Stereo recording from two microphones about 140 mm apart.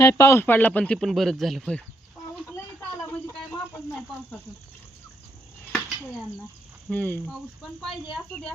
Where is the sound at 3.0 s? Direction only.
15° left (ahead or behind).